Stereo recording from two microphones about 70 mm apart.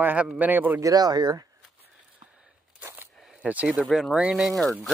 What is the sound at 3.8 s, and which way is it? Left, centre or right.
Speech, centre.